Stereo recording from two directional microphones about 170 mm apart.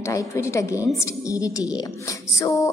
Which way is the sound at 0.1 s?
15° left (ahead or behind).